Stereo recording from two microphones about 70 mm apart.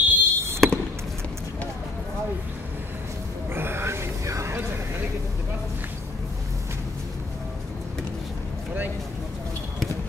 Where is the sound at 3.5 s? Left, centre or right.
Right.